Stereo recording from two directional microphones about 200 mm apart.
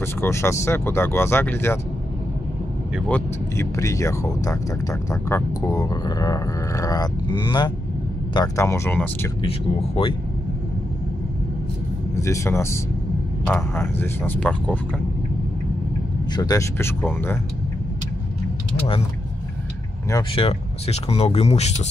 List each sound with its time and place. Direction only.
0.0 s speech: 10° left (ahead or behind)
3.1 s speech: 10° left (ahead or behind)
9.4 s speech: 25° left (ahead or behind)
12.2 s speech: 15° left (ahead or behind)
16.3 s speech: 15° left (ahead or behind)
20.1 s speech: 20° left (ahead or behind)
20.4 s speech: 30° left (ahead or behind)